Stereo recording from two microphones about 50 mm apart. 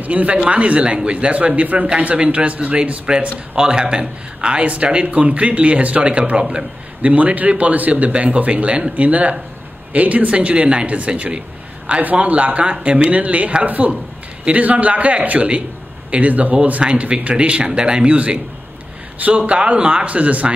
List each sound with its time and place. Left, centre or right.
0.0 s speech: right